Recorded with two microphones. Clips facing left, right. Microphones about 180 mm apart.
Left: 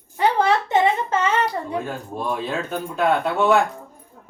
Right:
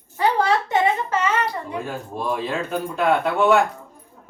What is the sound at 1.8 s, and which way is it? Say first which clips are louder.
Speech: left 1 dB; centre (ahead or behind).